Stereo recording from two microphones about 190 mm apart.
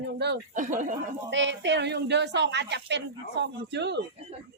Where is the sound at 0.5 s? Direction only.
40° right (ahead or behind).